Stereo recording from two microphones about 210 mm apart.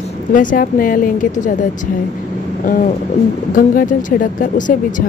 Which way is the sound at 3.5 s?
40° left (ahead or behind).